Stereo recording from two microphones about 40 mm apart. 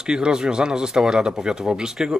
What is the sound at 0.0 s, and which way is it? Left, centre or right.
Speech, centre.